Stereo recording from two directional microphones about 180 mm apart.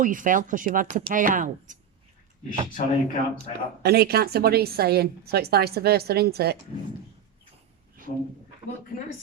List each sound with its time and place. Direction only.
0.0 s speech: 50° right (ahead or behind)
2.5 s speech: 45° left (ahead or behind)
3.8 s a woman's voice: 60° right (ahead or behind)